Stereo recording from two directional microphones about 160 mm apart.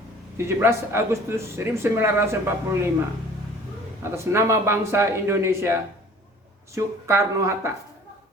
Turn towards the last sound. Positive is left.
turn(degrees=-20)  # may be behind; listen again after turning